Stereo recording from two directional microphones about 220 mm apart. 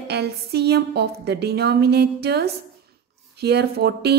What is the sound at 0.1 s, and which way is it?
A woman's voice, 45° right (ahead or behind).